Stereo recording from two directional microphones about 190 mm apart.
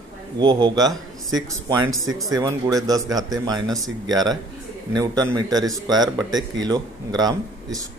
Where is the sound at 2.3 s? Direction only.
15° right (ahead or behind).